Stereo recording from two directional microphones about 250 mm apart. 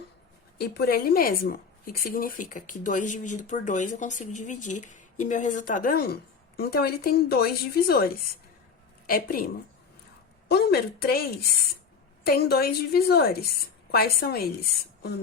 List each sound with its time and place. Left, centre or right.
0.6 s speech: left
10.5 s a woman's voice: left